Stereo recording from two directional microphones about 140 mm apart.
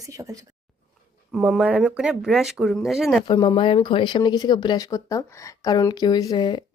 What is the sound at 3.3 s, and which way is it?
Speech, 30° left (ahead or behind).